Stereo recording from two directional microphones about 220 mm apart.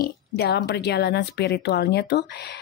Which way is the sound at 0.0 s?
45° left (ahead or behind).